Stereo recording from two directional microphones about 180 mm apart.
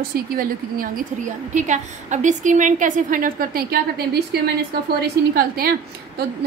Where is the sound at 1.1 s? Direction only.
40° right (ahead or behind).